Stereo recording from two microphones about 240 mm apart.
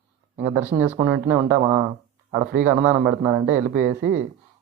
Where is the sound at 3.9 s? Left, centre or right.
Right.